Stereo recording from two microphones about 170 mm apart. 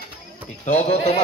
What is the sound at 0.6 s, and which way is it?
Speech, 40° left (ahead or behind).